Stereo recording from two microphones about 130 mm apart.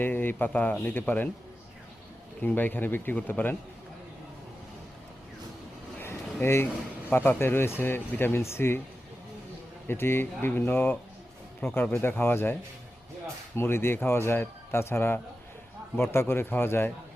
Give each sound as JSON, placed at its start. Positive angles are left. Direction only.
{"t": 0.0, "sound": "speech", "side_deg": 15}
{"t": 2.4, "sound": "speech", "side_deg": 15}
{"t": 6.0, "sound": "a sound", "side_deg": 20}
{"t": 7.1, "sound": "speech", "side_deg": 15}
{"t": 9.8, "sound": "speech", "side_deg": 15}
{"t": 13.6, "sound": "speech", "side_deg": 20}